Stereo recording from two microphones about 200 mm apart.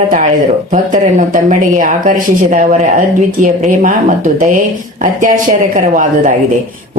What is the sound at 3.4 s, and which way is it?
Speech, 40° right (ahead or behind).